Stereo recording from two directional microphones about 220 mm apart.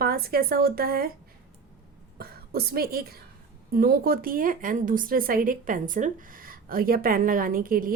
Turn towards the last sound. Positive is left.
turn(degrees=-40)  # may be behind; listen again after turning